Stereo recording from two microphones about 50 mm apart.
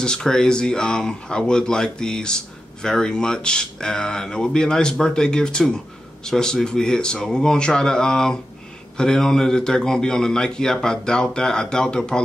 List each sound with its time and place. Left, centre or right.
0.0 s speech: centre